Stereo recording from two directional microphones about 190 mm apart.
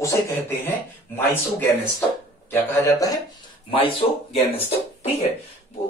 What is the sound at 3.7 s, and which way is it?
Speech, 30° left (ahead or behind).